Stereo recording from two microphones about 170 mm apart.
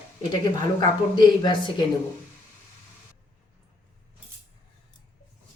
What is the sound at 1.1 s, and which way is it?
Speech, 25° left (ahead or behind).